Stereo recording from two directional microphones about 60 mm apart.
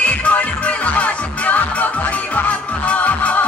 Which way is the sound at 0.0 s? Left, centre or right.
Left.